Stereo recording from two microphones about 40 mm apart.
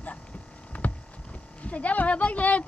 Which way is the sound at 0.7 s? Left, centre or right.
Left.